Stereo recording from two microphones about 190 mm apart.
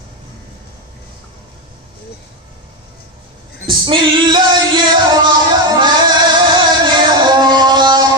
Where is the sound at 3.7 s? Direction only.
25° right (ahead or behind).